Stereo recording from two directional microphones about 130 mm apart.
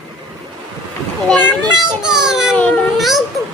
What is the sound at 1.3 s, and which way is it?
Speech, 10° left (ahead or behind).